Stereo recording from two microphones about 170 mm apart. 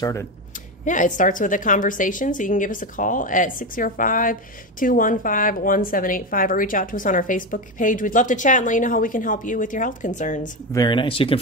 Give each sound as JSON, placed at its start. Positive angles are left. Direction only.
{"t": 0.0, "sound": "speech", "side_deg": 20}
{"t": 0.8, "sound": "a woman's voice", "side_deg": 50}
{"t": 10.7, "sound": "speech", "side_deg": 25}